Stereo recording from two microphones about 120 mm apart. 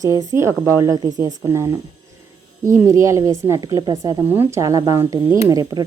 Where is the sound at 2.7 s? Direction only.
25° right (ahead or behind).